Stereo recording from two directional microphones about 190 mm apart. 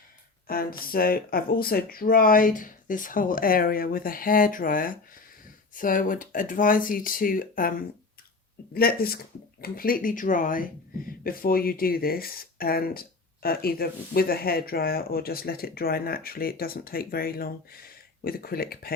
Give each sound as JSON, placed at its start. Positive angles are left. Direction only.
{"t": 0.4, "sound": "speech", "side_deg": 50}